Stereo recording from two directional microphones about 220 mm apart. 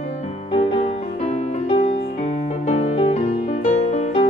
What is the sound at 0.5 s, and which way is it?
Music, 25° left (ahead or behind).